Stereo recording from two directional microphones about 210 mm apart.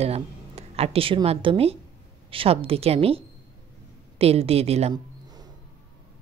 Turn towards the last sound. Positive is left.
turn(degrees=-20)  # may be behind; listen again after turning